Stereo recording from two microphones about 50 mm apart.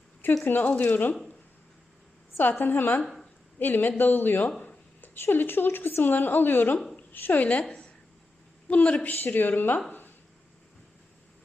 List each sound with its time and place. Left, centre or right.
0.4 s speech: left
2.4 s speech: left
3.0 s speech: centre
3.6 s a woman's voice: left
9.0 s speech: left